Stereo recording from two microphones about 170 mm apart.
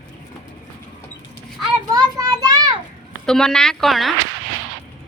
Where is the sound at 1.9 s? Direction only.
20° right (ahead or behind).